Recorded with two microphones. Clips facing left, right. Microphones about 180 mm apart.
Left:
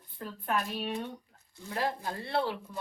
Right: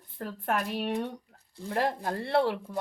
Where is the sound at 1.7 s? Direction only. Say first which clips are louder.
Right 4 dB; 60° right (ahead or behind).